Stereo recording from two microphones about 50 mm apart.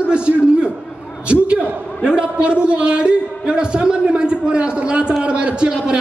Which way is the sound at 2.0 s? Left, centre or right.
Centre.